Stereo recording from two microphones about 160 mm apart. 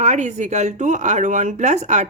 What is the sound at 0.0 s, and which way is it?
Speech, 45° right (ahead or behind).